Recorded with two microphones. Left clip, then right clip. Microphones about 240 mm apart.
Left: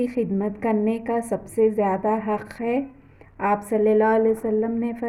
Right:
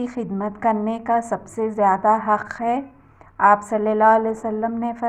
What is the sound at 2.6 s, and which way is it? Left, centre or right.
Speech, right.